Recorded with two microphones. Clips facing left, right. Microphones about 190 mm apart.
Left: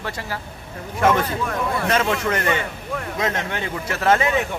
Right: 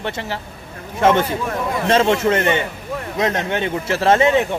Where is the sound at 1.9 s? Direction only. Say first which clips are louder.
Right 8 dB; 25° right (ahead or behind).